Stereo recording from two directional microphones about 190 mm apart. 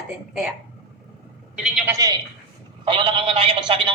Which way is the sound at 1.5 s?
5° right (ahead or behind).